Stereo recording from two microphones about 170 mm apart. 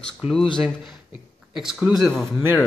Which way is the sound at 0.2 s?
35° left (ahead or behind).